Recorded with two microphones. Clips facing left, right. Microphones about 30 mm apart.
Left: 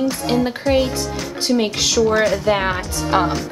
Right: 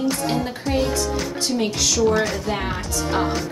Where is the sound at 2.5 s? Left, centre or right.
Left.